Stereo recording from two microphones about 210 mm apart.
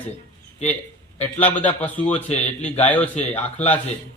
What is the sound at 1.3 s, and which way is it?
Speech, 5° left (ahead or behind).